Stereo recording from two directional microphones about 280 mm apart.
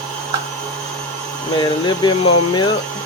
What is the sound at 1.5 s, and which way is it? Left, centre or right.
Speech, centre.